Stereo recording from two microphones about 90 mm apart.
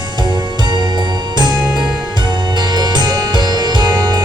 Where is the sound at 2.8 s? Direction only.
50° right (ahead or behind).